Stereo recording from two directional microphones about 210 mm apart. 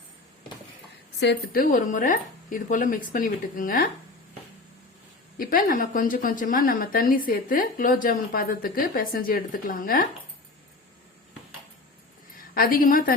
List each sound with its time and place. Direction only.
1.2 s a woman's voice: 55° left (ahead or behind)
1.6 s speech: 40° left (ahead or behind)
5.4 s a woman's voice: 45° left (ahead or behind)
12.4 s a woman's voice: 45° left (ahead or behind)